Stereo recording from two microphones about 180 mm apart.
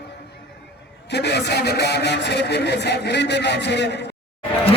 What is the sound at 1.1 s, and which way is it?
Speech, 70° left (ahead or behind).